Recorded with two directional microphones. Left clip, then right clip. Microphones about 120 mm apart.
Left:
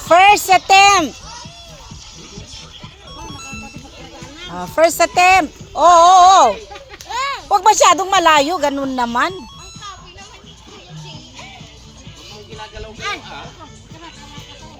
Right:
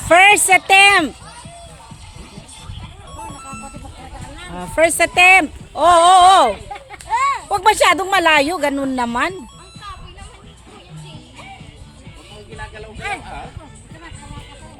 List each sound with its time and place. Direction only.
0.1 s speech: 25° right (ahead or behind)
4.5 s speech: 5° right (ahead or behind)
12.7 s a sound: 5° right (ahead or behind)